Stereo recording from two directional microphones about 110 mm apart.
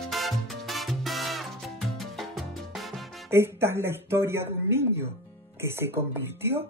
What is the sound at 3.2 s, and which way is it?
Speech, 20° right (ahead or behind).